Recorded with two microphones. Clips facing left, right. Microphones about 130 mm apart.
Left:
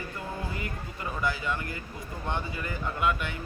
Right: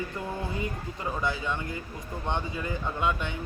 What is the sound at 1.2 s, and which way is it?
A man's voice, 20° right (ahead or behind).